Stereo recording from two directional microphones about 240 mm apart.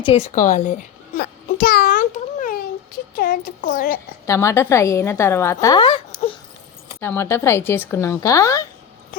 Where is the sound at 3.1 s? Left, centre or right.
Left.